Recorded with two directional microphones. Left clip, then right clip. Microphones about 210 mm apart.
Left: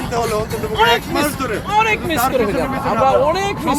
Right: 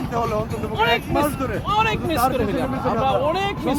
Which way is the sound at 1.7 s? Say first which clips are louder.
Left 4 dB; 15° right (ahead or behind).